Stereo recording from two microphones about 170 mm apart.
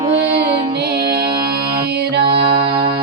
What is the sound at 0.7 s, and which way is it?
Music, 70° right (ahead or behind).